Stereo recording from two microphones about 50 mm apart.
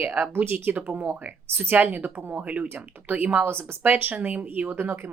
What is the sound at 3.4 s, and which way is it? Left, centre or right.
A woman's voice, right.